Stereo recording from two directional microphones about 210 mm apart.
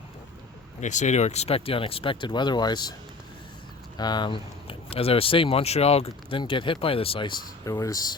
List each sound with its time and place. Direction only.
0.8 s speech: 35° left (ahead or behind); by 2.9 s 20° left (ahead or behind)
3.9 s speech: 20° left (ahead or behind)